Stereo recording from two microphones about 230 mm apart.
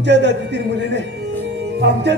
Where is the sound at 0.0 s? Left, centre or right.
Right.